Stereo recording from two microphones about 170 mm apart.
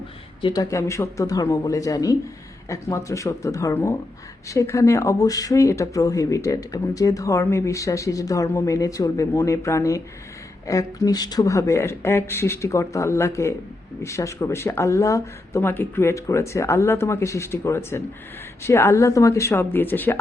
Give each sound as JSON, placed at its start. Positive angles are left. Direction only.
{"t": 0.4, "sound": "speech", "side_deg": 20}